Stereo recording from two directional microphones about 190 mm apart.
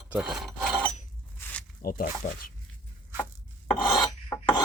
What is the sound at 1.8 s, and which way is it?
Speech, 50° left (ahead or behind).